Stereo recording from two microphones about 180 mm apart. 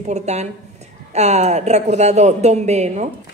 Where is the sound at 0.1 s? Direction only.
40° right (ahead or behind).